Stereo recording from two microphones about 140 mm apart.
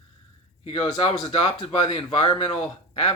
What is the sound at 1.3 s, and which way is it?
Speech, 35° left (ahead or behind).